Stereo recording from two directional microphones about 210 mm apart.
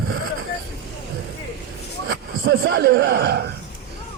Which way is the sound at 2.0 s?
50° right (ahead or behind).